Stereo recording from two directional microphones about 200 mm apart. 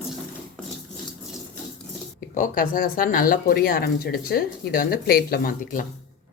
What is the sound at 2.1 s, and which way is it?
Speech, 40° left (ahead or behind).